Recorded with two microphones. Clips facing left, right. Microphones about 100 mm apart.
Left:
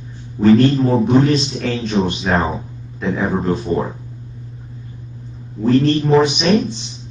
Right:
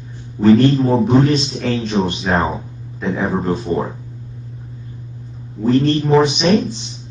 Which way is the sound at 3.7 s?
20° left (ahead or behind).